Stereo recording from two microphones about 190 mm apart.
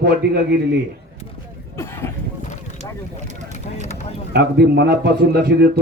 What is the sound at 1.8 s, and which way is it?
Speech, 15° left (ahead or behind).